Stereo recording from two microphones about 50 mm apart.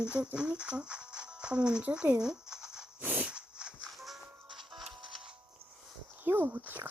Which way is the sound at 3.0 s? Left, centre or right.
Right.